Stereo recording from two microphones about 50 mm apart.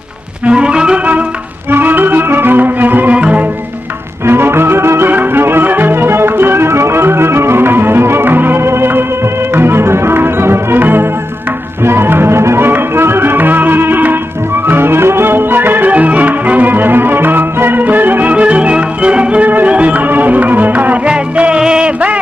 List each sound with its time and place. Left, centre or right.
0.5 s music: centre
1.7 s music: right
3.2 s music: right
4.3 s music: right
15.9 s music: right
18.3 s music: right
21.1 s music: right